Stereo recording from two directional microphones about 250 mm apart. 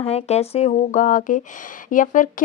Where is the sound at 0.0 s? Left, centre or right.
Left.